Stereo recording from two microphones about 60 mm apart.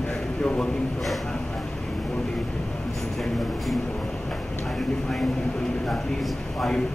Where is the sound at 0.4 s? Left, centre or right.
Centre.